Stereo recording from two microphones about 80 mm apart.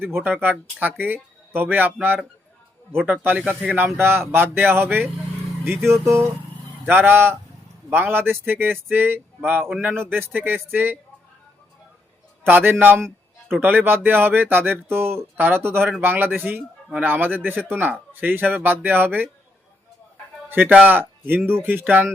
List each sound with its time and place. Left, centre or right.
0.0 s speech: right
9.6 s speech: centre
9.9 s speech: right
12.5 s speech: right
20.5 s speech: right